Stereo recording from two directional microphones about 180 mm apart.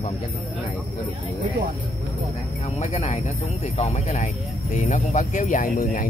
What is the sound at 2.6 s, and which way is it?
Speech, 40° left (ahead or behind).